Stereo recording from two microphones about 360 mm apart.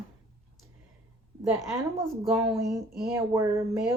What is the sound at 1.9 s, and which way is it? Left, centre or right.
Speech, centre.